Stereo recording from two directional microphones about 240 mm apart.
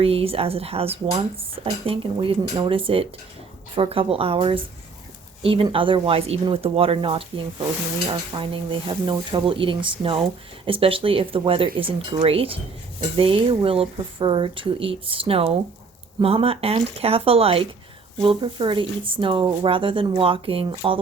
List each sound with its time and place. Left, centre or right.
0.0 s speech: right